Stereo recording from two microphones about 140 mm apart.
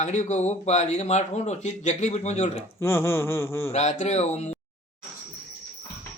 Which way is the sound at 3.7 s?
55° left (ahead or behind).